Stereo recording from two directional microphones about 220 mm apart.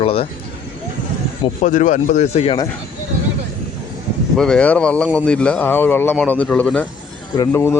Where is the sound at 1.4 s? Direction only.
35° left (ahead or behind).